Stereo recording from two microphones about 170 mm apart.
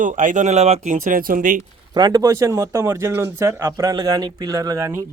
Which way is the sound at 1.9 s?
25° right (ahead or behind).